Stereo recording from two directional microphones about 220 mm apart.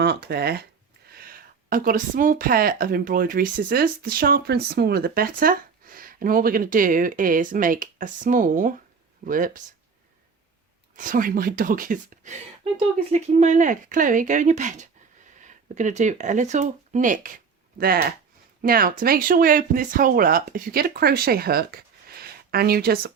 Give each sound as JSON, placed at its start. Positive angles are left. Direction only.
{"t": 0.0, "sound": "a woman's voice", "side_deg": -45}
{"t": 10.9, "sound": "a woman's voice", "side_deg": -40}